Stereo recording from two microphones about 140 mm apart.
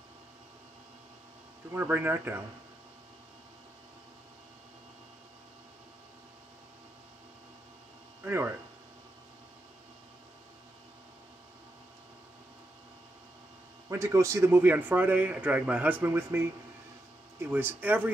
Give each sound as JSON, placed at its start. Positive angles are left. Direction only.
{"t": 1.7, "sound": "a man's voice", "side_deg": -15}
{"t": 8.2, "sound": "speech", "side_deg": -15}
{"t": 13.8, "sound": "a man's voice", "side_deg": -20}